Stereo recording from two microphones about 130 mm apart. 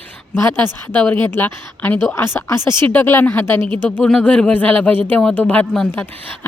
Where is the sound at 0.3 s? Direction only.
20° left (ahead or behind).